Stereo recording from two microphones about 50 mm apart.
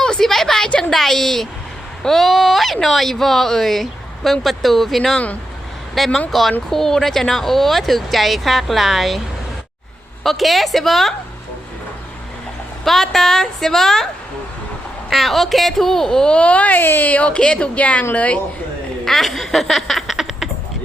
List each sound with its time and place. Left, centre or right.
0.0 s a woman's voice: centre
10.2 s speech: centre
12.8 s a woman's voice: centre
15.1 s a woman's voice: centre
16.4 s speech: left
16.8 s speech: left
17.1 s a woman's voice: left
19.0 s speech: centre